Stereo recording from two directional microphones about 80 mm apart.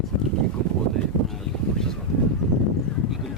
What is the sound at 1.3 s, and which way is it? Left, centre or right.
Speech, centre.